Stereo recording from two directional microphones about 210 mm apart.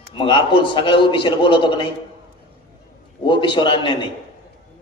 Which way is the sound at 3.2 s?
25° left (ahead or behind).